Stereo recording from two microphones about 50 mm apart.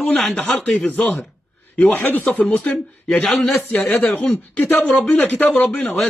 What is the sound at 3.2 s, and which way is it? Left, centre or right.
Speech, left.